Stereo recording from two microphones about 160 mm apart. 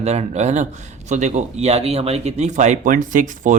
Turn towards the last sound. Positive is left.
turn(degrees=-55)  # may be behind; listen again after turning